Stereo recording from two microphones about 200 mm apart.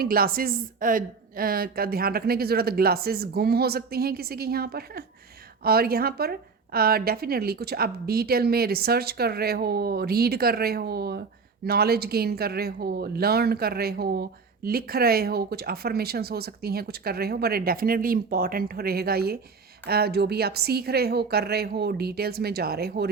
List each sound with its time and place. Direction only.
0.0 s speech: 50° right (ahead or behind)